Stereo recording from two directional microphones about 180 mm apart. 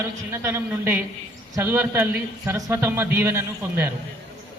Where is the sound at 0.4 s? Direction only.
15° right (ahead or behind).